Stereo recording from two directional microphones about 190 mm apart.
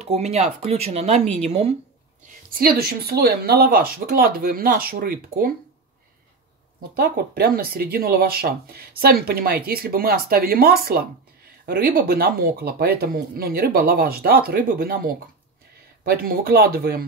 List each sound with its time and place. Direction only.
0.0 s speech: 35° right (ahead or behind)
2.5 s speech: 55° right (ahead or behind)
7.2 s speech: 50° right (ahead or behind)